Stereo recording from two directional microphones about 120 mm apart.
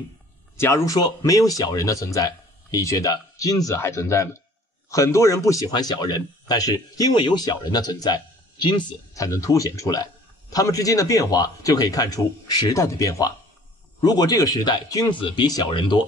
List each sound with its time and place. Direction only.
0.6 s speech: 20° left (ahead or behind); by 8.8 s 40° left (ahead or behind)
9.1 s speech: 25° left (ahead or behind)